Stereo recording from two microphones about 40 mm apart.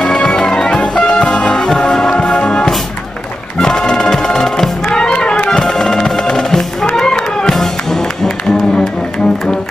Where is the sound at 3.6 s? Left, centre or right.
Centre.